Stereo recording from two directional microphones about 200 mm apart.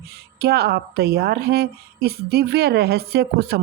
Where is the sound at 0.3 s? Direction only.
55° right (ahead or behind).